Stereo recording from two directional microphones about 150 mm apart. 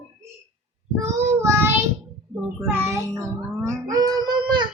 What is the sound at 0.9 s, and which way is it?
Child singing, 15° right (ahead or behind).